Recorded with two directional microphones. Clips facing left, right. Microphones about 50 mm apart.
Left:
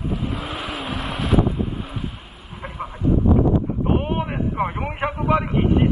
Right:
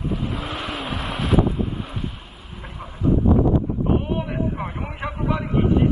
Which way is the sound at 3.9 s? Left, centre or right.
Left.